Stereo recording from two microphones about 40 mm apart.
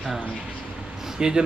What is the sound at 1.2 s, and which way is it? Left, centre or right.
Speech, centre.